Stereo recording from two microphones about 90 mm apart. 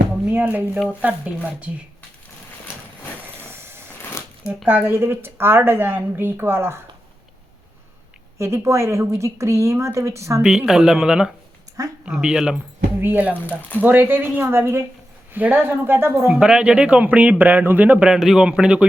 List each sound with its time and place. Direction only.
0.3 s speech: 20° right (ahead or behind)
3.3 s vehicle: 25° right (ahead or behind)
4.4 s a woman's voice: 20° right (ahead or behind)
8.4 s a woman's voice: 30° right (ahead or behind)
10.7 s speech: 5° right (ahead or behind)
13.0 s a woman's voice: 20° right (ahead or behind)
13.6 s speech: 20° left (ahead or behind)
13.8 s a woman's voice: 20° right (ahead or behind)
16.3 s speech: 10° right (ahead or behind)